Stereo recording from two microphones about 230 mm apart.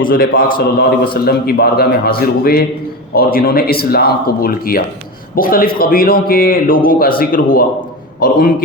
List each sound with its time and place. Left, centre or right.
0.0 s a man's voice: left